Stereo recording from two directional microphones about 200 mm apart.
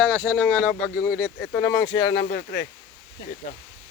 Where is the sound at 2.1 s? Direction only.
60° left (ahead or behind).